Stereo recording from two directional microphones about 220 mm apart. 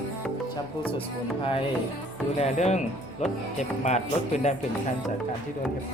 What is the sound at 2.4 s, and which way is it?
Speech, 30° left (ahead or behind).